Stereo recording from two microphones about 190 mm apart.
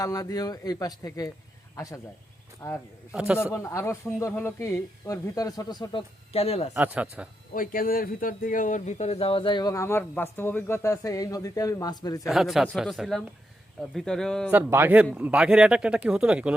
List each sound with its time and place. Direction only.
0.0 s speech: 20° left (ahead or behind)
3.1 s speech: 5° right (ahead or behind)
3.3 s speech: 15° left (ahead or behind); by 6.7 s 30° left (ahead or behind)
6.7 s a man's voice: 5° right (ahead or behind)
7.5 s speech: 45° left (ahead or behind); by 12.3 s 20° left (ahead or behind)
12.3 s speech: centre (ahead or behind)
14.5 s a man's voice: 10° right (ahead or behind)